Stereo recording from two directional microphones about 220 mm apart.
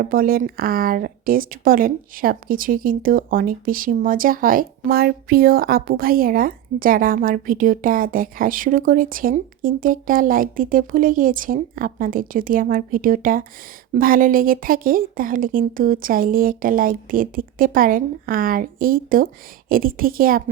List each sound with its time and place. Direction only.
0.0 s speech: 40° right (ahead or behind)